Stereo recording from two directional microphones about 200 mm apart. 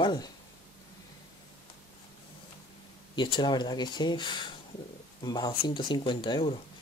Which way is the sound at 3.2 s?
25° left (ahead or behind).